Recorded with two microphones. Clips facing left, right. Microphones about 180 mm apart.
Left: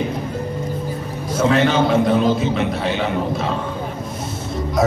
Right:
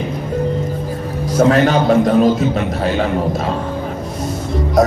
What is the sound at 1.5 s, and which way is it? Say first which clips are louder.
A man's voice: right 2 dB; 45° right (ahead or behind).